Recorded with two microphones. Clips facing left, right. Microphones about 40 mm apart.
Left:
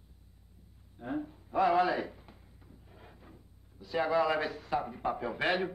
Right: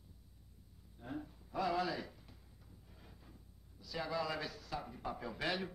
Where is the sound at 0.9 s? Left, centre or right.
Left.